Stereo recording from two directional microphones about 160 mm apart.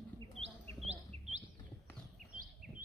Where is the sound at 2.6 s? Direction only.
55° right (ahead or behind).